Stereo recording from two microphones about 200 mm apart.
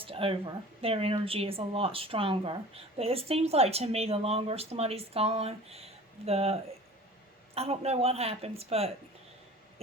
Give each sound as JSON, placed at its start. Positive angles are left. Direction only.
{"t": 0.0, "sound": "speech", "side_deg": -30}